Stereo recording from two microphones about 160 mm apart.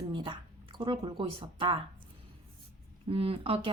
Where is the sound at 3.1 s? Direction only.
35° right (ahead or behind).